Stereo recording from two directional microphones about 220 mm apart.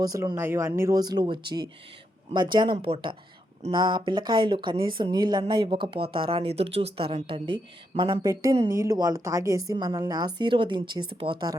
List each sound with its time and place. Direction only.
0.0 s speech: 15° right (ahead or behind)